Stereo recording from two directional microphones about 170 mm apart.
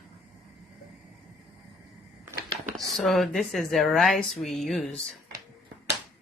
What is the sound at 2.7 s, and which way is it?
Speech, centre (ahead or behind).